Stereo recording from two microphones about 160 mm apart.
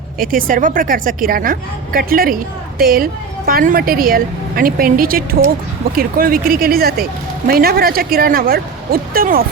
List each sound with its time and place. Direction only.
0.2 s a woman's voice: 60° right (ahead or behind)